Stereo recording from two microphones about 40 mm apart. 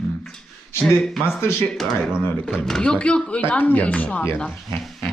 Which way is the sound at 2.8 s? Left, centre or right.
Left.